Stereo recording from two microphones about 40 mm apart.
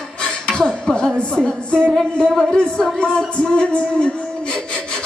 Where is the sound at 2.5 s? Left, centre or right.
Left.